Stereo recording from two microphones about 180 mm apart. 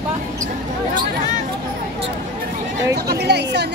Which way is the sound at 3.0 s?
65° right (ahead or behind).